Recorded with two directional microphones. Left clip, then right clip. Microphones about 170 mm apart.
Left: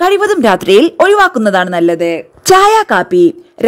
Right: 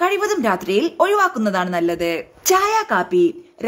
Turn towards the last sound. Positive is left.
turn(degrees=45)  # may be behind; listen again after turning